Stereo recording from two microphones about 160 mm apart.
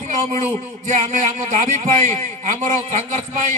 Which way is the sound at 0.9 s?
50° right (ahead or behind).